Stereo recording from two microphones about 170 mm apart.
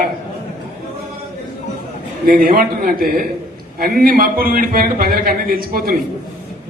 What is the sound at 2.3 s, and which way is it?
A man's voice, 60° right (ahead or behind).